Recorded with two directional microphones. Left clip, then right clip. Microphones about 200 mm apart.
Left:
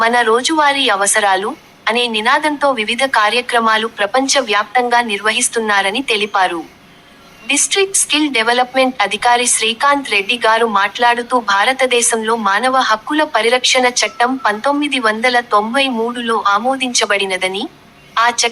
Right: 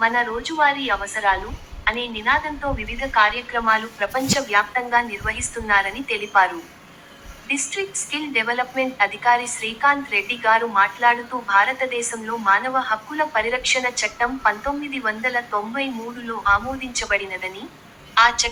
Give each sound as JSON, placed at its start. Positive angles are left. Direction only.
{"t": 0.0, "sound": "a woman's voice", "side_deg": 60}